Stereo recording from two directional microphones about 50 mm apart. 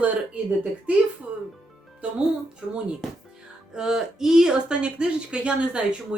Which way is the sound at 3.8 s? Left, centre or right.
Centre.